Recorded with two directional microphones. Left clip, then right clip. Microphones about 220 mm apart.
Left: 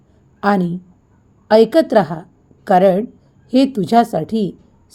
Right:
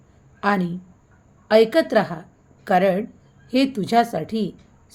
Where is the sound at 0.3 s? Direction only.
15° left (ahead or behind).